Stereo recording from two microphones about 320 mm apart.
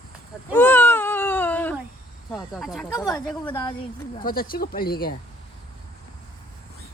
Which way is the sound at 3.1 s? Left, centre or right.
Centre.